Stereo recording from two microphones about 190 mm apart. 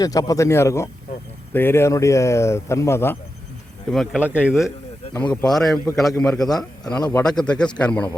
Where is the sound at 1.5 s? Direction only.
10° left (ahead or behind).